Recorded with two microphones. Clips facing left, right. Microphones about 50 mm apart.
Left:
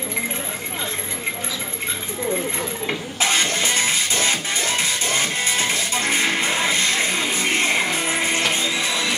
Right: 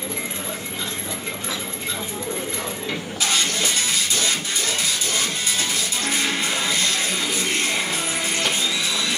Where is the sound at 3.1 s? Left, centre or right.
Left.